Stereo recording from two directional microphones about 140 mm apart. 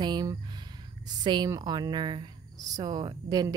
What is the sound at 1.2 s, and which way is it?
A woman's voice, 30° right (ahead or behind).